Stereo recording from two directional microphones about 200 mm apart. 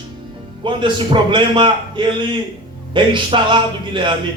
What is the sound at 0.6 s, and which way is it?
A man's voice, 25° right (ahead or behind).